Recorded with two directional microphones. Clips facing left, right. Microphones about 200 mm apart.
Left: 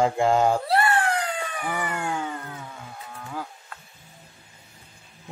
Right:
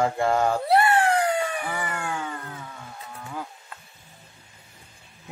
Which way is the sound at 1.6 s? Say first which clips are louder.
Left 2 dB; 20° left (ahead or behind).